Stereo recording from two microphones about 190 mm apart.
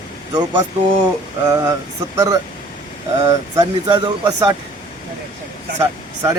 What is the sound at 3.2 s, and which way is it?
A man's voice, 20° right (ahead or behind).